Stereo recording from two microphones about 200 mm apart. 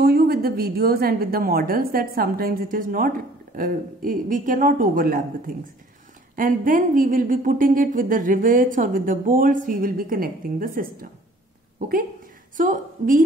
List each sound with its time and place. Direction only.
0.0 s a woman's voice: 50° right (ahead or behind)
12.5 s a woman's voice: 40° right (ahead or behind)